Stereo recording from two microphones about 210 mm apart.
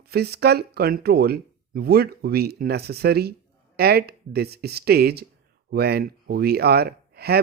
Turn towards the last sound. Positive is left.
turn(degrees=-50)  # may be behind; listen again after turning